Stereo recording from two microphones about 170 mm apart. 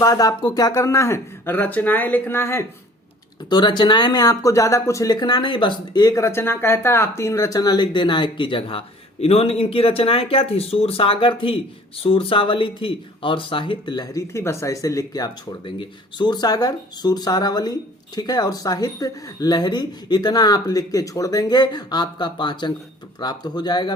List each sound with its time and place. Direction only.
0.0 s speech: 20° left (ahead or behind)
3.5 s speech: 25° left (ahead or behind)